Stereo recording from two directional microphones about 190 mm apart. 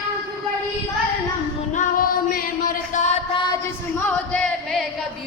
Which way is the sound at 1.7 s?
50° left (ahead or behind).